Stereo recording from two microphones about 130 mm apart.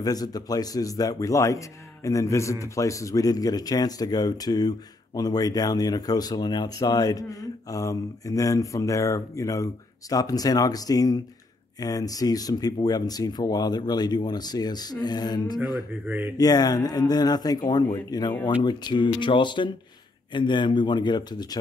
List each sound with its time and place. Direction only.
0.0 s speech: 30° left (ahead or behind)
16.1 s speech: 15° right (ahead or behind)
16.3 s speech: 30° left (ahead or behind)